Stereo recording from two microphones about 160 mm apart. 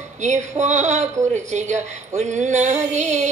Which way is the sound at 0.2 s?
45° right (ahead or behind).